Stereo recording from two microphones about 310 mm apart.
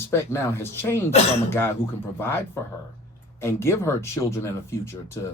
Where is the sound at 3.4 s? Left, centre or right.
Centre.